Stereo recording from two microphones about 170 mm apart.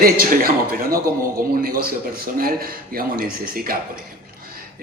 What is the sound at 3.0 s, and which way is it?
Speech, 60° right (ahead or behind).